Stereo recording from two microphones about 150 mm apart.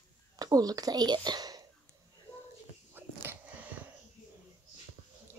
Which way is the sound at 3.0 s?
15° right (ahead or behind).